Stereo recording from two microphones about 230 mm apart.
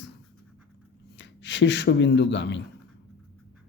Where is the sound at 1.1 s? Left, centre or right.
Left.